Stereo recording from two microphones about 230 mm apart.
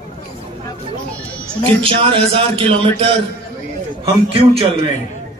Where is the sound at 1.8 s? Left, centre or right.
Right.